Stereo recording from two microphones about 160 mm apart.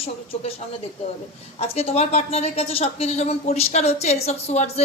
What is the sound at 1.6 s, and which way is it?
A woman's voice, 40° left (ahead or behind).